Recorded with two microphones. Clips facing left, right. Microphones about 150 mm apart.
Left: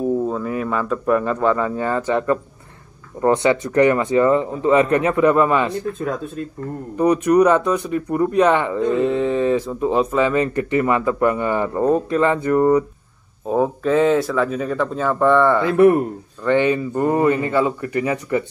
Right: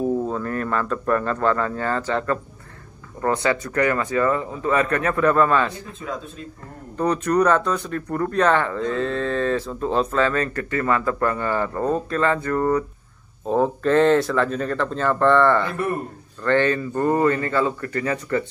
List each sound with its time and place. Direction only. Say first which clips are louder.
0.3 s speech: left 2 dB; 5° left (ahead or behind)
5.8 s speech: left 8 dB; 55° left (ahead or behind)
7.0 s speech: left 5 dB; 15° left (ahead or behind)